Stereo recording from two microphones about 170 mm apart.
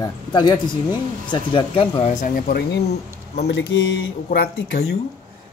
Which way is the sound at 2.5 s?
70° left (ahead or behind).